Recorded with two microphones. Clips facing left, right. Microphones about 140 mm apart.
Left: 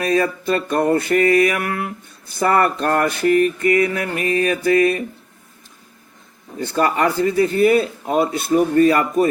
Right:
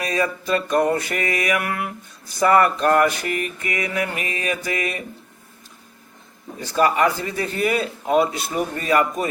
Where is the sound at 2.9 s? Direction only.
35° left (ahead or behind).